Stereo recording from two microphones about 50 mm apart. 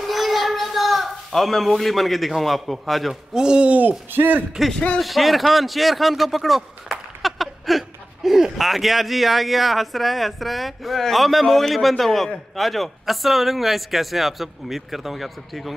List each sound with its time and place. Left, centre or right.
0.0 s a sound: centre
3.3 s speech: centre
4.1 s speech: right
4.6 s speech: centre